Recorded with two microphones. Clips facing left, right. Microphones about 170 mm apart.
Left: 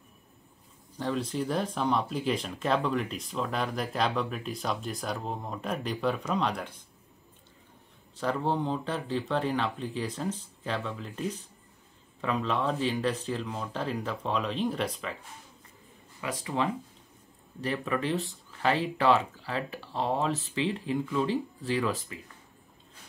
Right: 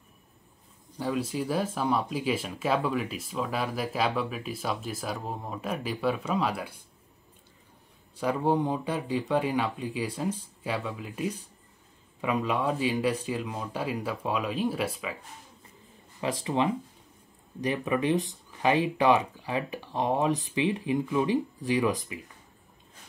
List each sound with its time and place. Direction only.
0.9 s speech: 10° right (ahead or behind)
8.2 s speech: 10° right (ahead or behind)
16.2 s speech: 25° right (ahead or behind)